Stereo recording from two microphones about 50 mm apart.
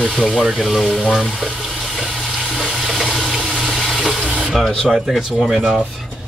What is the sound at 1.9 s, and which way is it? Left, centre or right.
Toilet flush, centre.